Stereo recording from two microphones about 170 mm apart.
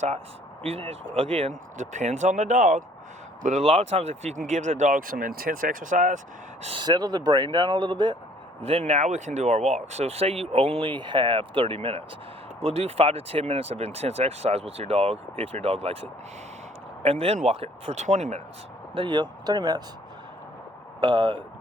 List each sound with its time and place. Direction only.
0.6 s speech: 35° right (ahead or behind)
6.6 s speech: 35° right (ahead or behind)
6.8 s speech: 25° right (ahead or behind)
8.6 s speech: 35° right (ahead or behind)
18.9 s speech: 25° right (ahead or behind)
21.0 s speech: 30° right (ahead or behind)